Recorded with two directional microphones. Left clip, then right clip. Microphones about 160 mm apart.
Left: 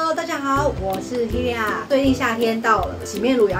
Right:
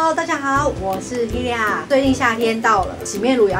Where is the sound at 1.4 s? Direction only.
10° left (ahead or behind).